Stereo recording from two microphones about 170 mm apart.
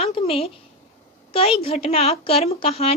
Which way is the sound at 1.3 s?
35° left (ahead or behind).